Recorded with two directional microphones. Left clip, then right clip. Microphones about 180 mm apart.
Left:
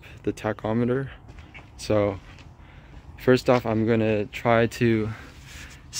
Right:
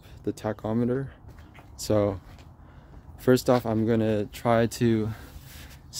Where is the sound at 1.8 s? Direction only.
25° right (ahead or behind).